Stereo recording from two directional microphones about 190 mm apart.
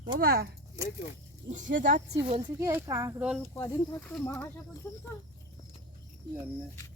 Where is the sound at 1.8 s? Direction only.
40° right (ahead or behind).